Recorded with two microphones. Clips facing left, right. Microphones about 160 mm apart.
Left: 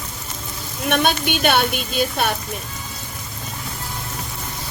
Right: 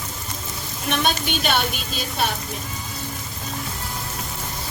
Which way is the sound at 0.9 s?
55° left (ahead or behind).